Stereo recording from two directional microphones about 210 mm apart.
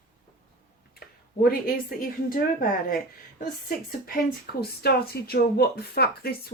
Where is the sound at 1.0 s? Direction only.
45° left (ahead or behind).